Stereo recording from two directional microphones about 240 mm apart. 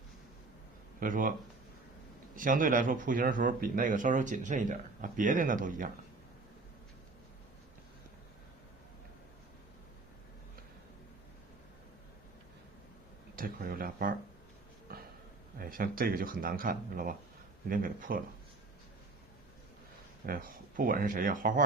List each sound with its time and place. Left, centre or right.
0.9 s speech: right
2.3 s speech: right
13.3 s speech: right
14.9 s a sound: right
15.5 s speech: right
20.2 s speech: right